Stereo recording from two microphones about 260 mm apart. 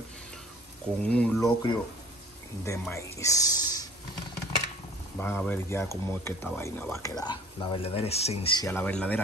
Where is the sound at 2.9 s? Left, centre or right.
Centre.